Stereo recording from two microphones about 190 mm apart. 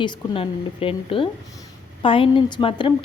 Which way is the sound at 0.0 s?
30° left (ahead or behind).